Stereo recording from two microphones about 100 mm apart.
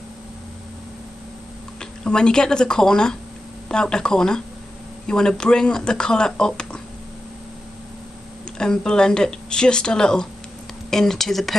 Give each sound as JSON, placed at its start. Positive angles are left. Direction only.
{"t": 1.8, "sound": "speech", "side_deg": 5}
{"t": 8.5, "sound": "speech", "side_deg": 5}